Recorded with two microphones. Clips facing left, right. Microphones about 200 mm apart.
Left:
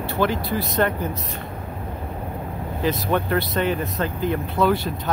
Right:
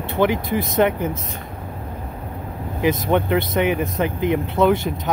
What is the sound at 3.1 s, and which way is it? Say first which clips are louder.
Speech: right 3 dB; 20° right (ahead or behind).